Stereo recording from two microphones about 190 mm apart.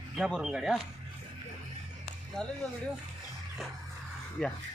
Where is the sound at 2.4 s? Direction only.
Centre (ahead or behind).